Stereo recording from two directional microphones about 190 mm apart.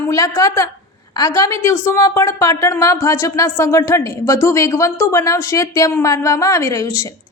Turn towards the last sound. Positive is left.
turn(degrees=15)  # may be behind; listen again after turning